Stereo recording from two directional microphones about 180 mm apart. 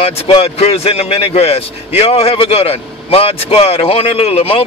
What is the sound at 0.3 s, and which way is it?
Speech, 35° left (ahead or behind).